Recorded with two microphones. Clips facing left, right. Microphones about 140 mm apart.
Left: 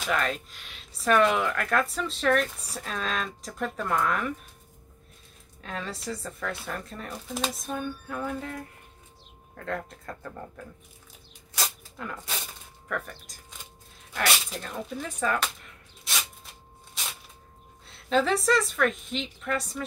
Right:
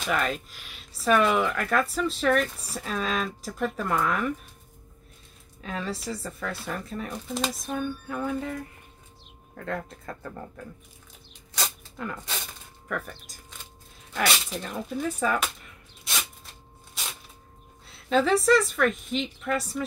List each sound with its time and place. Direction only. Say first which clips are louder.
0.0 s speech: right 1 dB; 5° right (ahead or behind)
5.6 s speech: right 3 dB; centre (ahead or behind)
11.5 s a sound: right 1 dB; centre (ahead or behind)
12.8 s speech: right 1 dB; centre (ahead or behind)
16.0 s a sound: right 1 dB; centre (ahead or behind)
17.8 s speech: right 1 dB; centre (ahead or behind)